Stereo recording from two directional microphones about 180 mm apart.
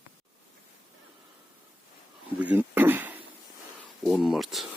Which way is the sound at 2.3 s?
10° right (ahead or behind).